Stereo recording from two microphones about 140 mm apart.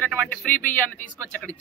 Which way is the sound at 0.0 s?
10° left (ahead or behind).